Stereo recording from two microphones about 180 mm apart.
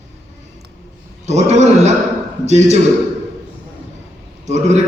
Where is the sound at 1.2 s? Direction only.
40° right (ahead or behind).